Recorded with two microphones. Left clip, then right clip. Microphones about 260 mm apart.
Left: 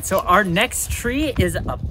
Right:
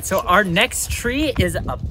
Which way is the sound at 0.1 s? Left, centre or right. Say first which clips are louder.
Even; centre.